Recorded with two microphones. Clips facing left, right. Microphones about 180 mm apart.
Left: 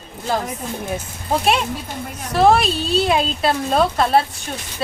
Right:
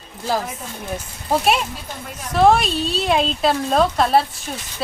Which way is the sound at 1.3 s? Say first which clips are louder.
Even; centre (ahead or behind).